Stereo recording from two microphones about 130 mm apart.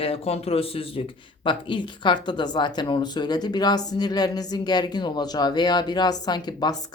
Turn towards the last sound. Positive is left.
turn(degrees=35)  # may be behind; listen again after turning